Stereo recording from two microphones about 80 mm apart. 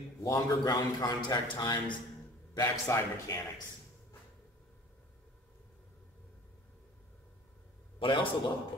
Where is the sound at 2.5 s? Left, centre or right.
Left.